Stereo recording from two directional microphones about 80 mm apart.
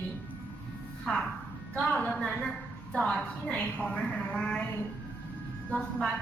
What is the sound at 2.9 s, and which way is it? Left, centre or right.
A woman's voice, centre.